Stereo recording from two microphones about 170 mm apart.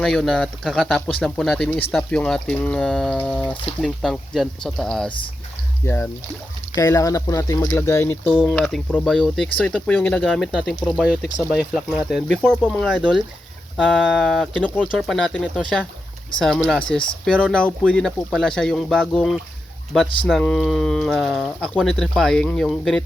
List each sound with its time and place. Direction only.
0.0 s speech: centre (ahead or behind)
5.8 s speech: 15° left (ahead or behind)
13.0 s speech: 5° right (ahead or behind)